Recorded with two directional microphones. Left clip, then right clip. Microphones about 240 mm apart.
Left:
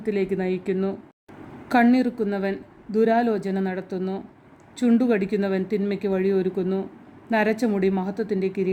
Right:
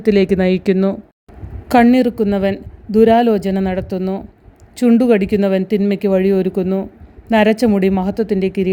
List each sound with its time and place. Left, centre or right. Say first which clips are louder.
0.0 s speech: right 11 dB; right